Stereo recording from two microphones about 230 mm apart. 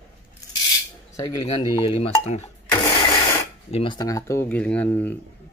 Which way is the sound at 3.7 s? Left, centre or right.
Centre.